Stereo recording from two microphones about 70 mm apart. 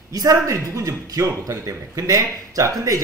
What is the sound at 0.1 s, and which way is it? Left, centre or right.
A man's voice, right.